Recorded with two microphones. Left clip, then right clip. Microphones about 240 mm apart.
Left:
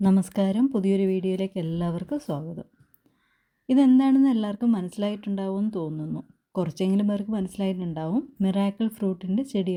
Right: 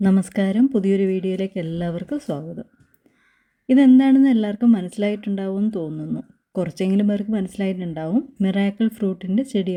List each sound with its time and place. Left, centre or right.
0.0 s speech: centre
3.7 s speech: centre